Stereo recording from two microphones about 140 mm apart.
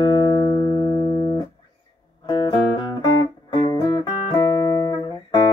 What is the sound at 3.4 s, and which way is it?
Music, 35° left (ahead or behind).